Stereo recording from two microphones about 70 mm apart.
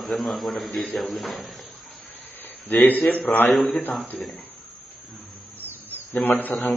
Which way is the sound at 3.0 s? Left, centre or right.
Centre.